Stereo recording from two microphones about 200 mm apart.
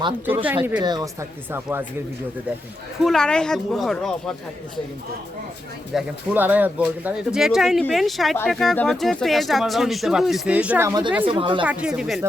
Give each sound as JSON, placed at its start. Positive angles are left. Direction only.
{"t": 0.4, "sound": "speech", "side_deg": -10}
{"t": 0.8, "sound": "speech", "side_deg": -20}
{"t": 3.0, "sound": "speech", "side_deg": 0}
{"t": 5.9, "sound": "speech", "side_deg": -5}
{"t": 11.6, "sound": "speech", "side_deg": -5}